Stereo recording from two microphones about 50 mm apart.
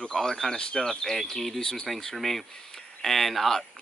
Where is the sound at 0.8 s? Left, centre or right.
Centre.